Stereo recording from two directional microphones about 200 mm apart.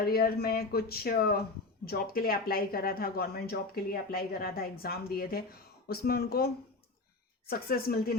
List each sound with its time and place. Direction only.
0.0 s speech: 50° left (ahead or behind)